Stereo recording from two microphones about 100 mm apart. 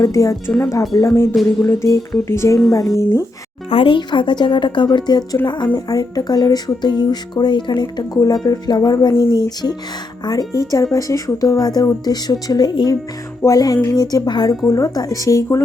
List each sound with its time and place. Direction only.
0.0 s speech: 30° left (ahead or behind)
3.7 s speech: 60° left (ahead or behind); by 15.6 s 30° left (ahead or behind)